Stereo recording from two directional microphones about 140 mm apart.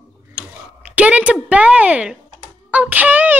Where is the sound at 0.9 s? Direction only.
10° right (ahead or behind).